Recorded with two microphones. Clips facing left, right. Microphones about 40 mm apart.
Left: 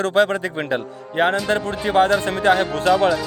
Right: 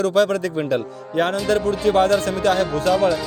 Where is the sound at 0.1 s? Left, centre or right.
Left.